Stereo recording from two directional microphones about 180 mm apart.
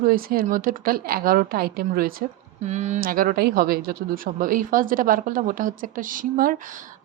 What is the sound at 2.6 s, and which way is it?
A woman's voice, 40° right (ahead or behind).